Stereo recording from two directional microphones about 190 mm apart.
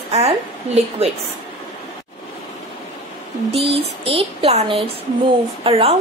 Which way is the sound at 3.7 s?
30° right (ahead or behind).